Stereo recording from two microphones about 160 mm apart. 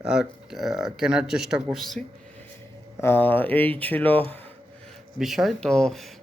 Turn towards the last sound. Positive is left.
turn(degrees=5)  # may be behind; listen again after turning